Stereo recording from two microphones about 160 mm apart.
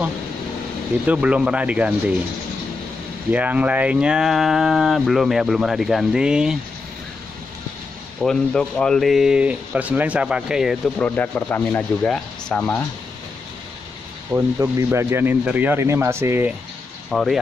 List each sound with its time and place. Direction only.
1.0 s speech: 10° right (ahead or behind)
3.3 s speech: 10° right (ahead or behind)
8.2 s speech: 5° left (ahead or behind)
11.0 s speech: 10° left (ahead or behind)
14.3 s speech: 15° right (ahead or behind)
17.1 s speech: centre (ahead or behind)